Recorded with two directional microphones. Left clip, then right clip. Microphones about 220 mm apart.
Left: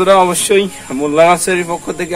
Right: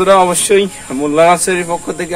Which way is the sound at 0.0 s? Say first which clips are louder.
Even; centre (ahead or behind).